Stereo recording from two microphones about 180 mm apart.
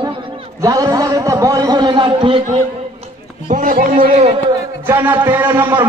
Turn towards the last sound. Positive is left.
turn(degrees=-15)  # may be behind; listen again after turning